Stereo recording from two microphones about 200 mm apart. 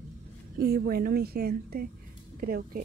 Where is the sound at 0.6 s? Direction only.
50° right (ahead or behind).